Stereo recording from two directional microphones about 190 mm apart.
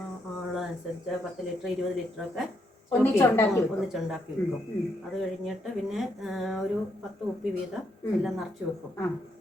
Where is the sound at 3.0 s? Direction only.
10° left (ahead or behind).